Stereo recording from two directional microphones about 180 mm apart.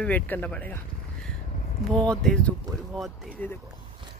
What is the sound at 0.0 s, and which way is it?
Speech, 10° left (ahead or behind).